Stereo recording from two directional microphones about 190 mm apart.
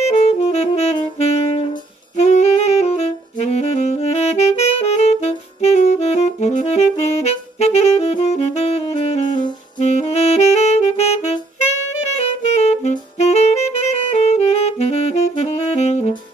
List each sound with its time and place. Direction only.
0.0 s saxophone: 35° left (ahead or behind)
2.1 s saxophone: 35° left (ahead or behind)